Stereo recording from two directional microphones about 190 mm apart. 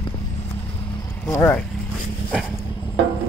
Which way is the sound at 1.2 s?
10° left (ahead or behind).